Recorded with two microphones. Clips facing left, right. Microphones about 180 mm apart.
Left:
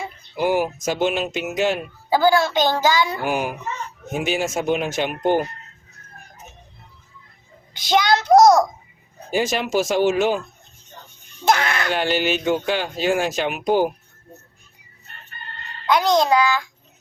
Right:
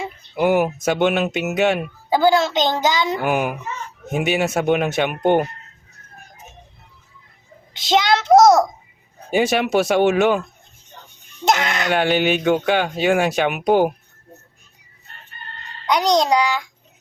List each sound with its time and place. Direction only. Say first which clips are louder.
0.3 s speech: right 3 dB; 65° right (ahead or behind)
2.0 s a child's voice: right 1 dB; 20° right (ahead or behind)
3.2 s speech: right 3 dB; 60° right (ahead or behind)
7.7 s a child's voice: right 1 dB; 25° right (ahead or behind)
9.3 s speech: right 3 dB; 65° right (ahead or behind)
11.4 s a child's voice: even; 20° right (ahead or behind)
11.9 s speech: right 5 dB; 60° right (ahead or behind)
15.9 s a child's voice: even; 20° right (ahead or behind)